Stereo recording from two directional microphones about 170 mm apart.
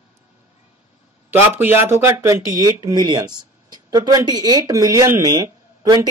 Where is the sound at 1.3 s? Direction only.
10° right (ahead or behind).